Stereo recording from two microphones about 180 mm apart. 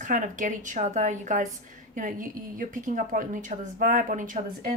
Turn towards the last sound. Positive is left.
turn(degrees=-45)  # may be behind; listen again after turning